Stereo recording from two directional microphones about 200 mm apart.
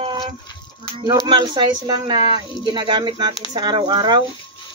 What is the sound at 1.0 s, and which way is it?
Speech, 20° right (ahead or behind).